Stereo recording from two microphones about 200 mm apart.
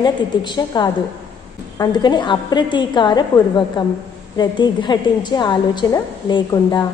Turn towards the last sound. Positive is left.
turn(degrees=20)  # may be behind; listen again after turning